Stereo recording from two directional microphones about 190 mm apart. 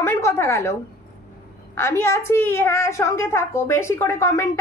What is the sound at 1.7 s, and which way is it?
A woman's voice, 15° left (ahead or behind).